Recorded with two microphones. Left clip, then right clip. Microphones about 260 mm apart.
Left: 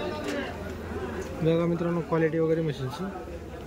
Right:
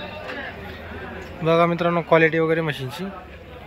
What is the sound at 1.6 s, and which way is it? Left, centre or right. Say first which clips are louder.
Speech: right 9 dB; right.